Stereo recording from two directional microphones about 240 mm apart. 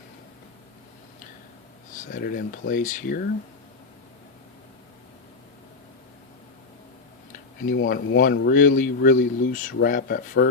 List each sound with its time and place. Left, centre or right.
2.0 s speech: left
7.9 s speech: left